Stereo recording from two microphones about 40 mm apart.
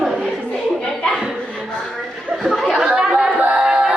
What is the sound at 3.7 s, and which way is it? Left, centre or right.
Music, right.